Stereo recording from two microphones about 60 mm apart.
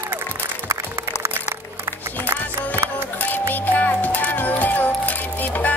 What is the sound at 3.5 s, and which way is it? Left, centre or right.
Music, left.